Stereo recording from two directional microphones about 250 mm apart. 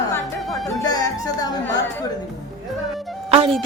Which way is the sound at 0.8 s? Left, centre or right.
Centre.